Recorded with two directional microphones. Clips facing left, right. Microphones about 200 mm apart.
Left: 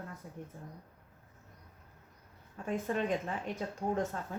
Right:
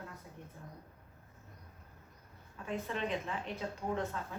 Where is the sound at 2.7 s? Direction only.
45° left (ahead or behind).